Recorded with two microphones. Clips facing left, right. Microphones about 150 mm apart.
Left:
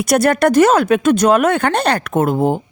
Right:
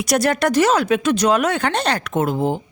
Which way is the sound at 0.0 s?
55° left (ahead or behind).